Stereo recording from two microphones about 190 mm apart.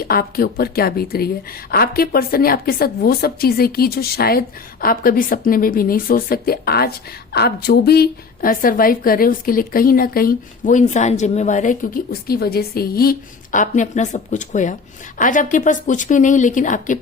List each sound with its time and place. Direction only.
0.0 s a woman's voice: 55° left (ahead or behind)